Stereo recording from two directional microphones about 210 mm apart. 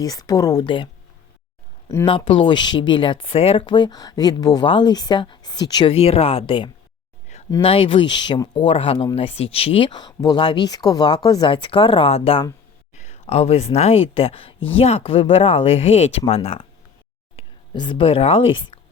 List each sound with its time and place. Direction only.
0.0 s a woman's voice: 20° left (ahead or behind)
2.0 s speech: 25° left (ahead or behind)